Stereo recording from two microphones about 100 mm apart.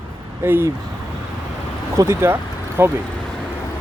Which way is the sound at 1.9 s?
30° right (ahead or behind).